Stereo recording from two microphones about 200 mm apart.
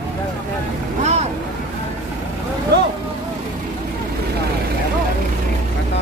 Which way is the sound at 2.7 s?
60° right (ahead or behind).